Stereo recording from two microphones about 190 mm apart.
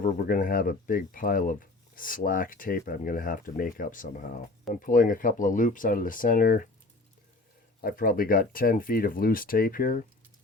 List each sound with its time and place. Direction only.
0.0 s speech: 50° left (ahead or behind)
7.8 s speech: 50° left (ahead or behind)